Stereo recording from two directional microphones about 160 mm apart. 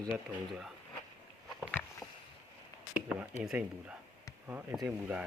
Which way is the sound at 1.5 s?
5° left (ahead or behind).